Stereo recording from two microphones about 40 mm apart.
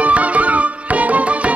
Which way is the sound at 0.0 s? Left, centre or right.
Right.